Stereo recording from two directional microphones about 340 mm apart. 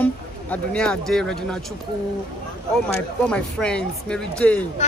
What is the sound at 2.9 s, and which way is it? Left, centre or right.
Speech, centre.